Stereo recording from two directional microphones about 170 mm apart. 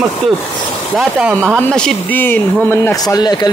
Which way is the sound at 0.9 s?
5° right (ahead or behind).